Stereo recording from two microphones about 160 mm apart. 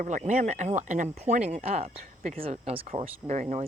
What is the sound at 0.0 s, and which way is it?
Speech, 50° right (ahead or behind).